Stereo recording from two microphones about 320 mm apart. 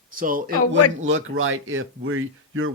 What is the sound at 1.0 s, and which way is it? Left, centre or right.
Speech, right.